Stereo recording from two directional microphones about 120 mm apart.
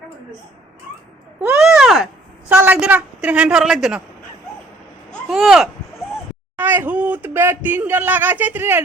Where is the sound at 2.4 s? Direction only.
15° right (ahead or behind).